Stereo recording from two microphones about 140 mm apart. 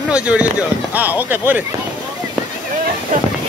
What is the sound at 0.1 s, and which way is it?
Speech, 10° right (ahead or behind).